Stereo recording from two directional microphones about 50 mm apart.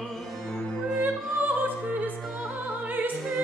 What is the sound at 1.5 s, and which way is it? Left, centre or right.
Opera, right.